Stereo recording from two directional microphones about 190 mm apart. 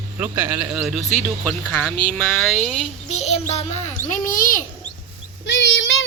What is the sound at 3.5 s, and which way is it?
A child's voice, 35° left (ahead or behind).